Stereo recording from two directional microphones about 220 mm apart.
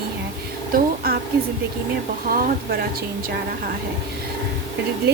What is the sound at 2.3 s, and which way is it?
Speech, 45° right (ahead or behind).